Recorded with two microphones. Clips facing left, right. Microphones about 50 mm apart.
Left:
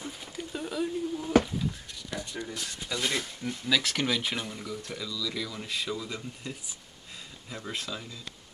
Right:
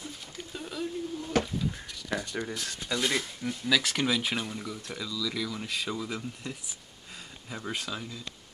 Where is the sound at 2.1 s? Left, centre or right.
Right.